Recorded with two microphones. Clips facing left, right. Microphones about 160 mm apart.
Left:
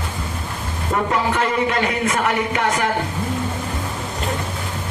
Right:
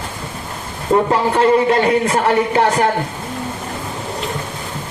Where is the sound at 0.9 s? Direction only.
30° right (ahead or behind).